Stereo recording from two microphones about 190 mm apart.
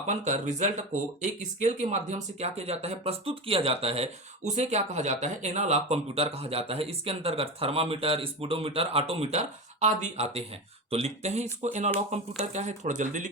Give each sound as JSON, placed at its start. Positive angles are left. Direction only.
{"t": 0.1, "sound": "speech", "side_deg": -40}